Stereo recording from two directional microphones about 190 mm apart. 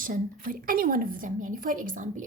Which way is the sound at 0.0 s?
45° right (ahead or behind).